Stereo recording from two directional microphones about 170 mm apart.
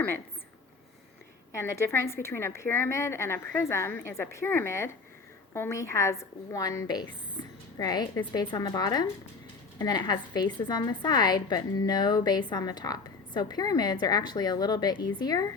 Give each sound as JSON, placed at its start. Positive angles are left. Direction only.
{"t": 1.5, "sound": "a woman's voice", "side_deg": 15}